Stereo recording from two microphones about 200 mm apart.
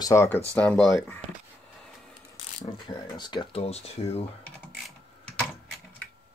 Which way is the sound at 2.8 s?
20° left (ahead or behind).